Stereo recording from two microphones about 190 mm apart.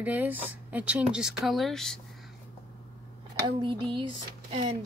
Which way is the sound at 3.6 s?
25° right (ahead or behind).